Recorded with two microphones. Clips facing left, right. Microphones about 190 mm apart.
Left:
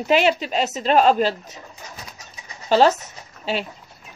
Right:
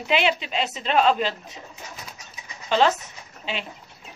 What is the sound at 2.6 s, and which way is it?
Speech, 40° left (ahead or behind).